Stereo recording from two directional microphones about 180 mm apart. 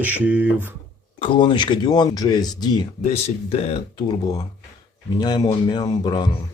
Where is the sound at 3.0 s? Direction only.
35° left (ahead or behind).